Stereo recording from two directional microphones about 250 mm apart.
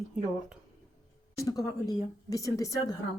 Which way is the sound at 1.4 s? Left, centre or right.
Centre.